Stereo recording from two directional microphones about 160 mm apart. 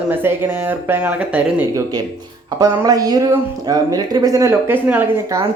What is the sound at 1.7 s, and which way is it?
Speech, 25° right (ahead or behind).